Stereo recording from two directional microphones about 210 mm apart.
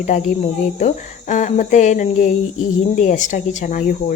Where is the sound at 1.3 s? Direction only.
35° left (ahead or behind).